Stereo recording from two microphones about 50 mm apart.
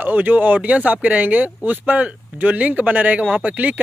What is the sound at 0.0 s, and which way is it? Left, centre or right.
Speech, right.